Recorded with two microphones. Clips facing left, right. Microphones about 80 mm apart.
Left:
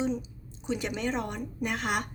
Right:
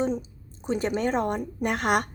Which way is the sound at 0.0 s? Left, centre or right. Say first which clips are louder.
Right 3 dB; right.